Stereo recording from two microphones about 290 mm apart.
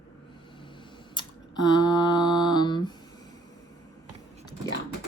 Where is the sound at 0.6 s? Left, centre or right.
Centre.